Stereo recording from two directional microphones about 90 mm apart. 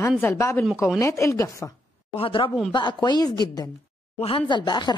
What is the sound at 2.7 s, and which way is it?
Speech, 55° left (ahead or behind).